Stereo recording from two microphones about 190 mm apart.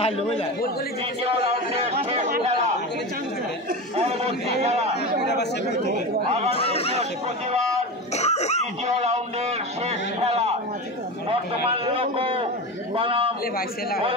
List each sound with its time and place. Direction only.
1.4 s a man's voice: 30° right (ahead or behind)
3.9 s a man's voice: 35° right (ahead or behind)
5.2 s chatter: 60° left (ahead or behind)
5.9 s a man's voice: 40° right (ahead or behind)
6.5 s a man's voice: 30° left (ahead or behind)
8.2 s laughter: 35° left (ahead or behind)
8.8 s a man's voice: 35° right (ahead or behind)
11.8 s a man's voice: 30° right (ahead or behind)